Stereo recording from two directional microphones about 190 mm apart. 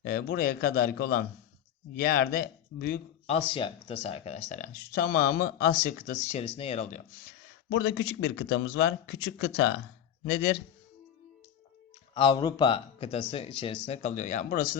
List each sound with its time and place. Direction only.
0.0 s speech: 55° left (ahead or behind)
3.2 s speech: 30° left (ahead or behind); by 6.1 s 55° left (ahead or behind)
6.1 s speech: 35° left (ahead or behind)
7.3 s speech: 65° left (ahead or behind)
12.1 s speech: 25° left (ahead or behind); by 14.8 s 45° left (ahead or behind)